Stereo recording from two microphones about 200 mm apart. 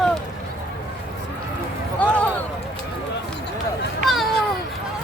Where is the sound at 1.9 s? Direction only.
5° left (ahead or behind).